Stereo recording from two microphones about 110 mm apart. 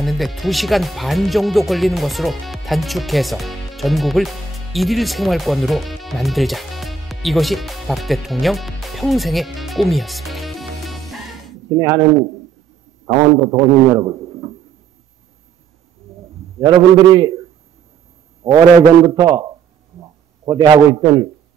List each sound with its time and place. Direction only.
0.0 s speech: centre (ahead or behind)
11.8 s a man's voice: 35° right (ahead or behind)
16.5 s a man's voice: 40° right (ahead or behind)
18.4 s a man's voice: 30° right (ahead or behind)
20.0 s a sound: 40° right (ahead or behind)